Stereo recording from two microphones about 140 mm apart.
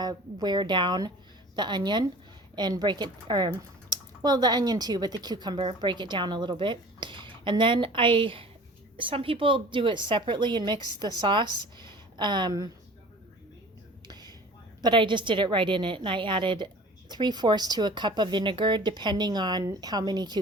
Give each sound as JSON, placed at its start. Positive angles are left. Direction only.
{"t": 0.0, "sound": "speech", "side_deg": -30}
{"t": 14.1, "sound": "a sound", "side_deg": -30}
{"t": 14.8, "sound": "speech", "side_deg": -35}